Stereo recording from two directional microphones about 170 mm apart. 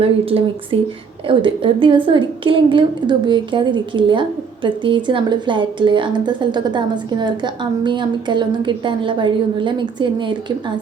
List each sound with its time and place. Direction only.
0.0 s a woman's voice: 35° right (ahead or behind)